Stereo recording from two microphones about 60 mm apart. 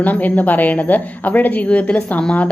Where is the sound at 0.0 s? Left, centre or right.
Left.